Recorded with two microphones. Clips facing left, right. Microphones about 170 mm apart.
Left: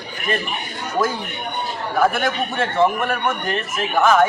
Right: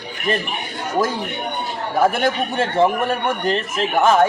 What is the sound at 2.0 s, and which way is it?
A man's voice, 30° right (ahead or behind).